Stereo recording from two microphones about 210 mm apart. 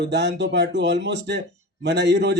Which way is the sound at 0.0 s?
55° right (ahead or behind).